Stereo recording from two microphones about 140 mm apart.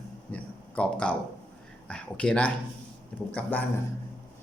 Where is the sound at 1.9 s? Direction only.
5° left (ahead or behind).